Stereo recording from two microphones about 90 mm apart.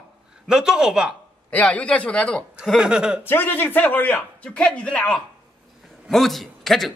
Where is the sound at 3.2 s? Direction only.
25° left (ahead or behind).